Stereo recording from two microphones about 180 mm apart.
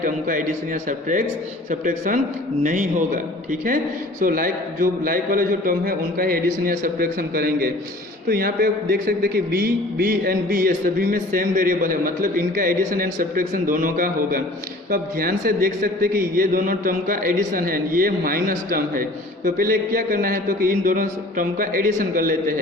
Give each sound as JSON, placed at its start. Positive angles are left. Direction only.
{"t": 0.0, "sound": "a man's voice", "side_deg": -50}
{"t": 4.2, "sound": "a man's voice", "side_deg": -50}